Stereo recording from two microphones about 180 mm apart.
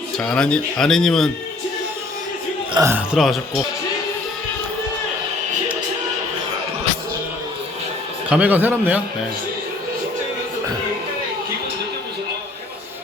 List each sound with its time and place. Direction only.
0.2 s speech: 5° left (ahead or behind)
2.7 s a man's voice: 15° right (ahead or behind)
3.1 s speech: centre (ahead or behind)
8.3 s a man's voice: 10° right (ahead or behind)